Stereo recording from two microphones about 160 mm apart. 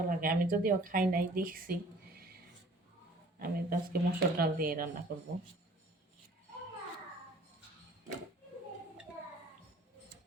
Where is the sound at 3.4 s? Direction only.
70° right (ahead or behind).